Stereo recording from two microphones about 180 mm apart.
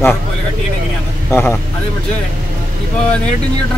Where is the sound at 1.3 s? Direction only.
10° left (ahead or behind).